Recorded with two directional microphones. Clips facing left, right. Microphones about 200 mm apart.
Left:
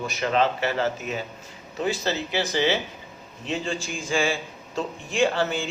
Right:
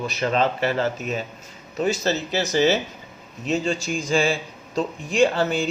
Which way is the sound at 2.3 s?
45° right (ahead or behind).